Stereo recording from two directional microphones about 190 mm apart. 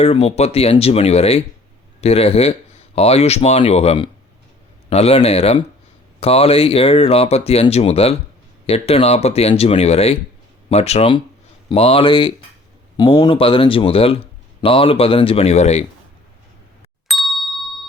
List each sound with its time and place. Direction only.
0.0 s speech: 35° left (ahead or behind)
17.1 s ding: centre (ahead or behind)